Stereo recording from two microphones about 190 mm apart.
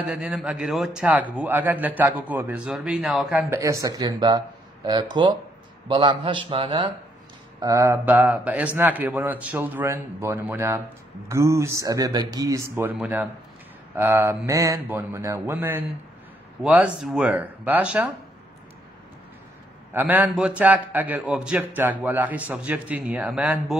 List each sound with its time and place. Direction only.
0.0 s a man's voice: 5° right (ahead or behind); by 6.9 s 30° right (ahead or behind)
7.6 s a man's voice: 15° right (ahead or behind)
19.9 s a man's voice: 10° right (ahead or behind)